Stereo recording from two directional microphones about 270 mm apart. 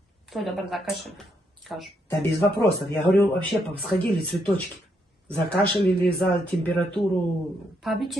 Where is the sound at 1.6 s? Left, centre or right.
Centre.